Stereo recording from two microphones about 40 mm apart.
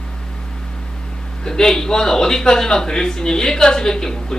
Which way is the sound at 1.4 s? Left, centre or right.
Centre.